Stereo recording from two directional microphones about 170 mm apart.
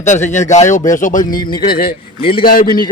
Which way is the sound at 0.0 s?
45° left (ahead or behind).